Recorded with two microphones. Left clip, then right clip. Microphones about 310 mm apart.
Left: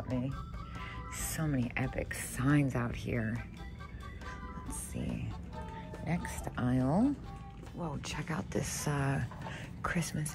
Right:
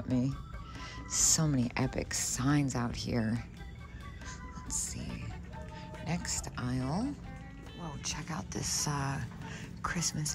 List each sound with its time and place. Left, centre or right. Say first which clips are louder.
0.1 s speech: right 5 dB; centre
6.0 s speech: right 1 dB; centre